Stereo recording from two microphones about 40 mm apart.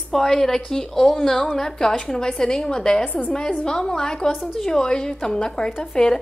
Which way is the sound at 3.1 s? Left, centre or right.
Left.